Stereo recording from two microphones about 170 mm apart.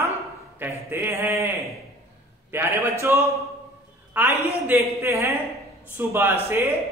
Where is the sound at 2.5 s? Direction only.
15° right (ahead or behind).